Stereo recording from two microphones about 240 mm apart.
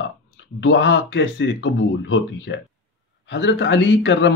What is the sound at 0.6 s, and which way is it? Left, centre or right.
A man's voice, left.